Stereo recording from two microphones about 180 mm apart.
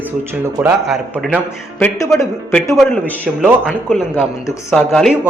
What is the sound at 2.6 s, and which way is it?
Speech, 15° left (ahead or behind).